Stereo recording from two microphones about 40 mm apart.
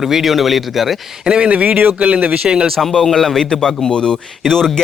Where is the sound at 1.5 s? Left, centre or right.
Right.